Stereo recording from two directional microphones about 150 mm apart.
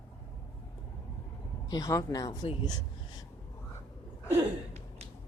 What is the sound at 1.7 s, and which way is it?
A woman's voice, 25° left (ahead or behind).